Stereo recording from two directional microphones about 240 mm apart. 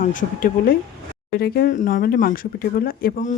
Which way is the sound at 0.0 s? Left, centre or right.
Left.